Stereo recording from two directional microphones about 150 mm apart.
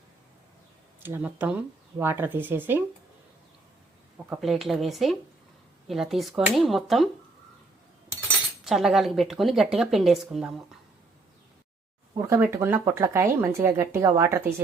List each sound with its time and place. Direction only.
1.0 s speech: 15° right (ahead or behind)
4.4 s speech: centre (ahead or behind)
8.6 s speech: centre (ahead or behind)
12.3 s speech: 15° right (ahead or behind)